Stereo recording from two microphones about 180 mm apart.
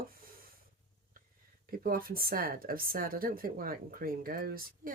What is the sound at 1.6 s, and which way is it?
A woman's voice, 55° right (ahead or behind).